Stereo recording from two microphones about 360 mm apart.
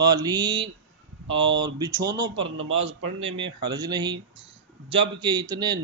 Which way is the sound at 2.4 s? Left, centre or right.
Right.